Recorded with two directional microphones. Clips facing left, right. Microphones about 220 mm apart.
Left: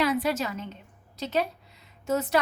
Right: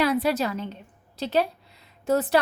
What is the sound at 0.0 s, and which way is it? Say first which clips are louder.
A woman's voice: right 3 dB; 35° right (ahead or behind).